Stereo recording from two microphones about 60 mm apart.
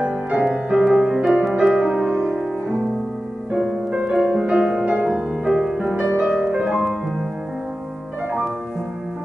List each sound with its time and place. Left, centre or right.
0.0 s music: right
0.5 s music: centre
3.9 s music: centre